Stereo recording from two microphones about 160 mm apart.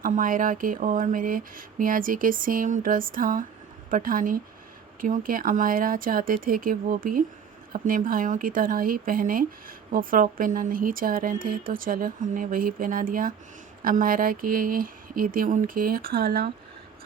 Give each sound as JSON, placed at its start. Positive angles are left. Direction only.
{"t": 0.0, "sound": "a woman's voice", "side_deg": -60}